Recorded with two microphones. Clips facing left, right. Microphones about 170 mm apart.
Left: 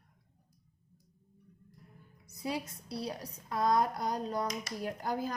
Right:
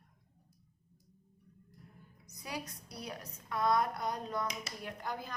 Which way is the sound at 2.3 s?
25° left (ahead or behind).